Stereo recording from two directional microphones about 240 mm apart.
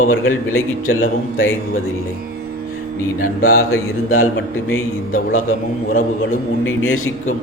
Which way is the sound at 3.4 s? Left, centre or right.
Left.